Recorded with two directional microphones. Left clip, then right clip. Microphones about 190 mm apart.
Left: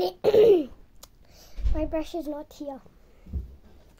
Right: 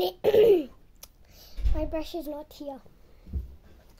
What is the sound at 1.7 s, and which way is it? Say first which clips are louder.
A child's voice: left 3 dB; centre (ahead or behind).